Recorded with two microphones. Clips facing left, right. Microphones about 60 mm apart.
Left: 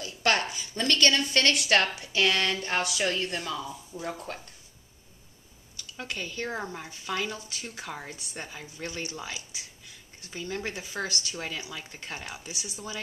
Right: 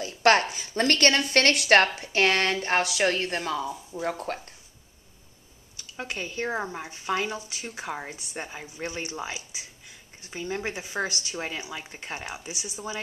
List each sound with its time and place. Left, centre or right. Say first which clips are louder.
0.0 s a woman's voice: right 6 dB; right
5.8 s speech: right 2 dB; centre